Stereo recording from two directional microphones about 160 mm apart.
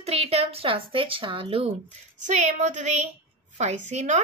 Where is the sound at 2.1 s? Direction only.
50° right (ahead or behind).